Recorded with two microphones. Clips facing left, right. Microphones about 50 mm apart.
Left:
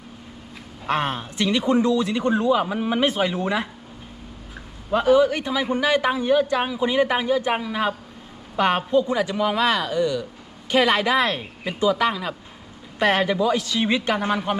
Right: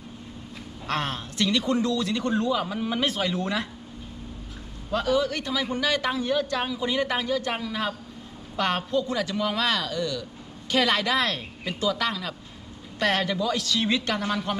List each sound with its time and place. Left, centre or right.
0.9 s a man's voice: centre
4.9 s a man's voice: left